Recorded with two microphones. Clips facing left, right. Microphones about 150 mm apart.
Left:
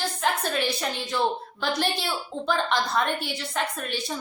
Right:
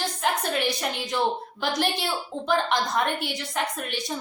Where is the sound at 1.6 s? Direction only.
15° right (ahead or behind).